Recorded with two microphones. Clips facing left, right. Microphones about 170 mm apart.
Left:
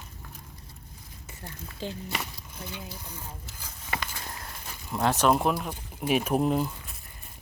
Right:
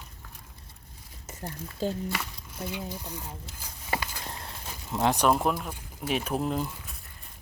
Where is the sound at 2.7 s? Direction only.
15° right (ahead or behind).